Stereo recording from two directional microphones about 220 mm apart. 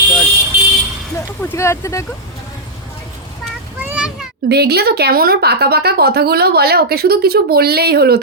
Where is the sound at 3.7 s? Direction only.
5° right (ahead or behind).